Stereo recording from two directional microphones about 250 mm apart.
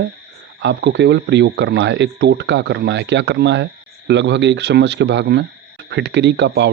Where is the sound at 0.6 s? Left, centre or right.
Right.